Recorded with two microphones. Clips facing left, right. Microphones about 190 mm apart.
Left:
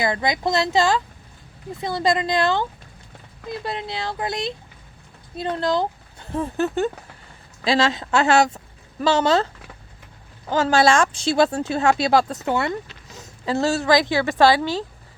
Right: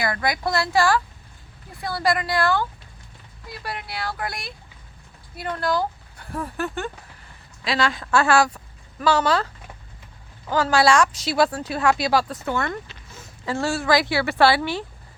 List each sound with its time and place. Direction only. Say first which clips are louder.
0.0 s speech: left 2 dB; 20° left (ahead or behind)
10.5 s speech: left 1 dB; 25° left (ahead or behind)